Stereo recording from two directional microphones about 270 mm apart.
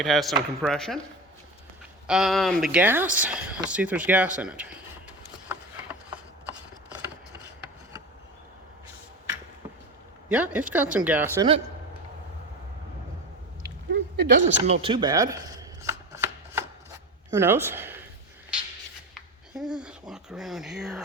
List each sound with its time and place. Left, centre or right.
0.0 s speech: centre
2.0 s speech: centre
10.2 s speech: centre
13.9 s speech: right
14.4 s speech: right
15.9 s shuffling cards: centre
17.3 s speech: centre
19.1 s speech: centre